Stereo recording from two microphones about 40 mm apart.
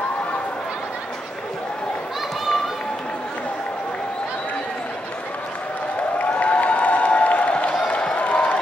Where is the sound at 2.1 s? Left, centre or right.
Centre.